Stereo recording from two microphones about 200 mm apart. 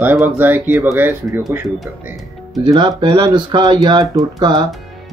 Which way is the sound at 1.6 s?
Centre (ahead or behind).